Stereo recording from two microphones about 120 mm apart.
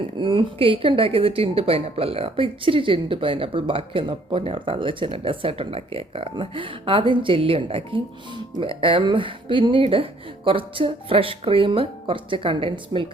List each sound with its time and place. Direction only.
0.2 s speech: 45° right (ahead or behind)